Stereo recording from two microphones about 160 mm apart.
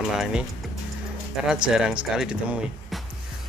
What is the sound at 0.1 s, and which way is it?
Speech, 5° right (ahead or behind).